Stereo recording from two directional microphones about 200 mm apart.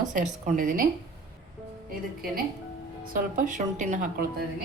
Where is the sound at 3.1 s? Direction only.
40° right (ahead or behind).